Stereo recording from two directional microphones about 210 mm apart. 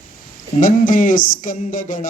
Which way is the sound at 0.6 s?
40° left (ahead or behind).